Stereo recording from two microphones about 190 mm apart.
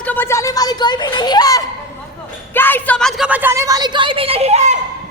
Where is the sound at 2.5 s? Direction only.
10° left (ahead or behind); by 4.7 s 35° right (ahead or behind).